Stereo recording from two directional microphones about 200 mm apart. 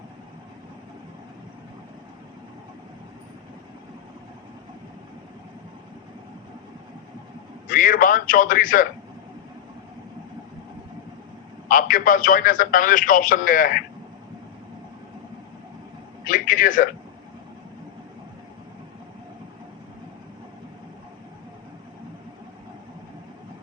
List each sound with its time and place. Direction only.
7.7 s a man's voice: 40° left (ahead or behind)
11.7 s a man's voice: 40° left (ahead or behind)
16.2 s a sound: 40° left (ahead or behind)